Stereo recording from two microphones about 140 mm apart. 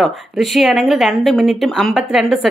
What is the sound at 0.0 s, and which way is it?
Speech, centre (ahead or behind).